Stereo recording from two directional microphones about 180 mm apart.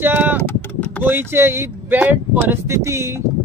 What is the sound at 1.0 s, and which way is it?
Speech, 10° right (ahead or behind).